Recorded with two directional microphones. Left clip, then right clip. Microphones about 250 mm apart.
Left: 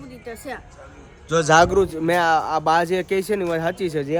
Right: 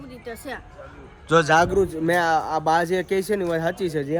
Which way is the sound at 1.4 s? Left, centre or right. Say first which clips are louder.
Left 7 dB; left.